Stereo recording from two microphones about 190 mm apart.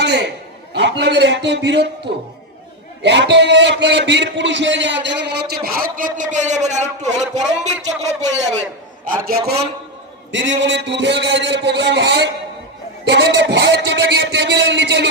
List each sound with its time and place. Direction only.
0.0 s a sound: 65° right (ahead or behind)
0.7 s a man's voice: 65° right (ahead or behind)
3.0 s a man's voice: 65° right (ahead or behind); by 8.6 s 35° right (ahead or behind)
9.1 s a man's voice: 50° right (ahead or behind)
10.6 s a man's voice: 70° right (ahead or behind)